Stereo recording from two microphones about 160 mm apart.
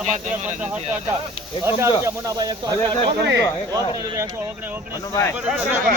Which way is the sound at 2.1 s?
25° right (ahead or behind).